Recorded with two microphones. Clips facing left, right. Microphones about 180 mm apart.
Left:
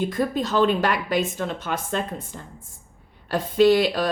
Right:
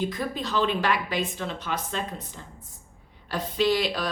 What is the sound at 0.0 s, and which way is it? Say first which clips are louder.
Speech: left 5 dB; 50° left (ahead or behind).